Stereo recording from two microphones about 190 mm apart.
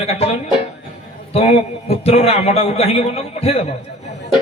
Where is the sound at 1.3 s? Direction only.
35° left (ahead or behind).